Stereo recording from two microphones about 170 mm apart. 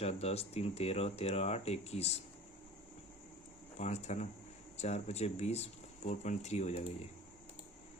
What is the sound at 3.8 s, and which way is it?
Speech, 40° left (ahead or behind).